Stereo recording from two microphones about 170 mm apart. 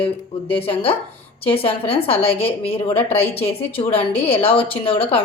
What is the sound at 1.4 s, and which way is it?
A woman's voice, 35° left (ahead or behind).